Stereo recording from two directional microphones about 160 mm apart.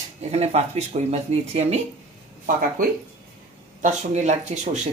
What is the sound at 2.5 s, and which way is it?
Speech, 60° right (ahead or behind).